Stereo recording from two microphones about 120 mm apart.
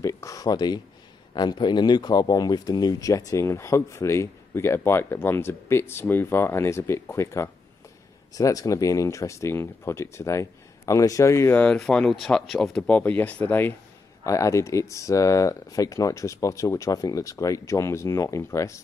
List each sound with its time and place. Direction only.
0.0 s a sound: 25° left (ahead or behind)
1.3 s speech: 35° left (ahead or behind)
11.5 s speech: 5° left (ahead or behind)
14.2 s speech: 25° left (ahead or behind)